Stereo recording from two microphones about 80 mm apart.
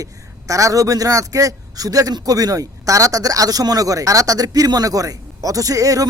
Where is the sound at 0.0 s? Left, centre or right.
Right.